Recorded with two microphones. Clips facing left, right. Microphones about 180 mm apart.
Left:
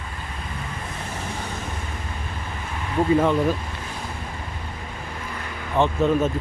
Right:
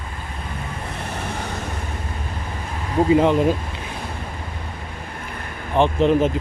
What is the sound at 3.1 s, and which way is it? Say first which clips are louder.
Speech: right 3 dB; 20° right (ahead or behind).